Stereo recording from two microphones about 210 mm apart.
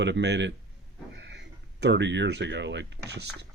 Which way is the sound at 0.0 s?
55° right (ahead or behind).